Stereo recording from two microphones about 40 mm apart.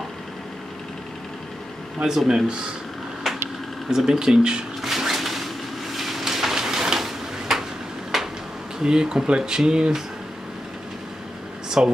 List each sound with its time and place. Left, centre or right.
2.0 s speech: centre
3.3 s a sound: centre
3.9 s speech: centre
4.8 s a sound: centre
8.8 s speech: centre
11.8 s speech: right